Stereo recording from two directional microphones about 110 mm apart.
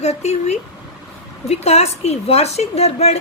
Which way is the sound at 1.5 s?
75° left (ahead or behind).